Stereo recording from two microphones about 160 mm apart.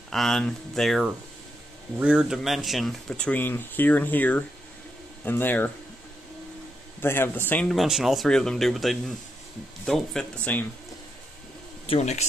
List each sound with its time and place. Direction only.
0.1 s a man's voice: centre (ahead or behind)
7.0 s a man's voice: 15° left (ahead or behind)
7.7 s speech: centre (ahead or behind)
11.9 s speech: 45° left (ahead or behind)